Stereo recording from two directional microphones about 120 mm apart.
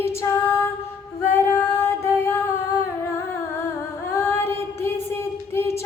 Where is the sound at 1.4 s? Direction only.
20° left (ahead or behind).